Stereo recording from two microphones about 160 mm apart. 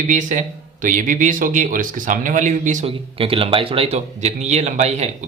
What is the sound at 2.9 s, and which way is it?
A man's voice, 35° right (ahead or behind).